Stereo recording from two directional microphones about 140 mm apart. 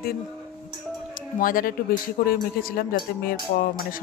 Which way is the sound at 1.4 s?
80° left.